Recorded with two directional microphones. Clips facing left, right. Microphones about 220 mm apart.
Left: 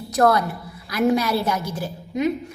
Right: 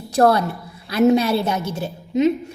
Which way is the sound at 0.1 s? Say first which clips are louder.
Right 2 dB; 30° right (ahead or behind).